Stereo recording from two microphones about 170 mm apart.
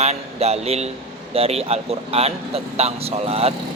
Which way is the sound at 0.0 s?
40° right (ahead or behind).